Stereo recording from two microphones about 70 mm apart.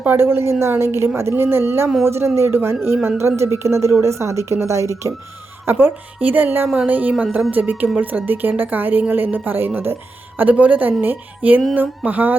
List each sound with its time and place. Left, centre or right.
0.0 s a woman's voice: right
5.6 s a woman's voice: right